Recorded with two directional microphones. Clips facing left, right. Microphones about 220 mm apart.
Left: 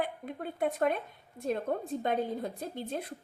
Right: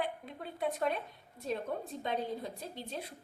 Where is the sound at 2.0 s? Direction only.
50° left (ahead or behind).